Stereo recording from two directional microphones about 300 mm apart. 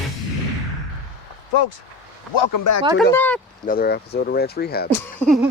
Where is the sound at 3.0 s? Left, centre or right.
Centre.